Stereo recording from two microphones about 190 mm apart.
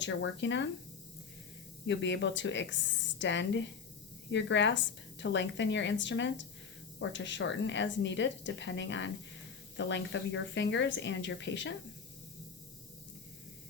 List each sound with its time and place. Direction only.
0.0 s a woman's voice: 70° left (ahead or behind)
1.9 s a woman's voice: 70° left (ahead or behind)